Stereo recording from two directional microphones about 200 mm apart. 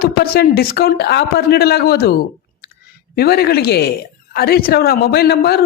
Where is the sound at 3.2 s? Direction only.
50° left (ahead or behind).